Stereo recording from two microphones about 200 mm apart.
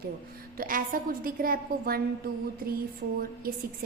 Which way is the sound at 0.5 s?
45° right (ahead or behind).